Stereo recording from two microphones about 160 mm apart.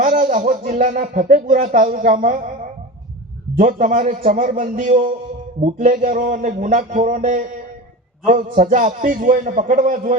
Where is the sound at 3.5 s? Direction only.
55° right (ahead or behind).